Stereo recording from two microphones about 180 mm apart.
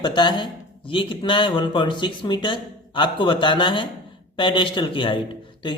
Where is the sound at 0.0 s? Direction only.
25° left (ahead or behind).